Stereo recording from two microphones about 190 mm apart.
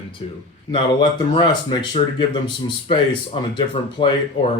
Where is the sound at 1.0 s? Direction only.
25° left (ahead or behind).